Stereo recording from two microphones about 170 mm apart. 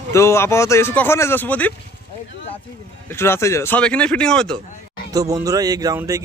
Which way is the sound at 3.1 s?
15° left (ahead or behind).